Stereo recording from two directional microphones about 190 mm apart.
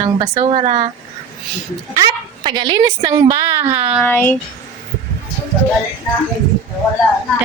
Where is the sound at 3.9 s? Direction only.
10° left (ahead or behind).